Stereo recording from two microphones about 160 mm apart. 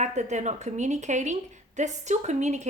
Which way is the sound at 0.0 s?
45° right (ahead or behind).